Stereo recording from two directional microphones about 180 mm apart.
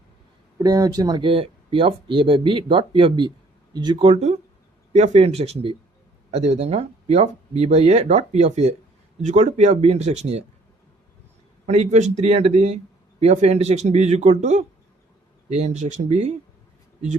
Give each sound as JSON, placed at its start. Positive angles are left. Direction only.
{"t": 0.6, "sound": "speech", "side_deg": -20}
{"t": 11.6, "sound": "speech", "side_deg": -40}